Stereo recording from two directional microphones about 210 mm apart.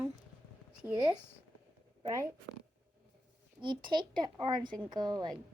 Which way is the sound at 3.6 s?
20° right (ahead or behind).